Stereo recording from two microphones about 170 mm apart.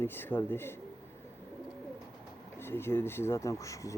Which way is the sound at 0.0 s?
10° left (ahead or behind).